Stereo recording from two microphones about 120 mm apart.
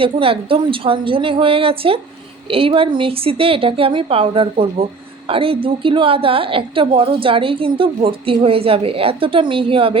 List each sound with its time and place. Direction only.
0.0 s a woman's voice: 50° right (ahead or behind)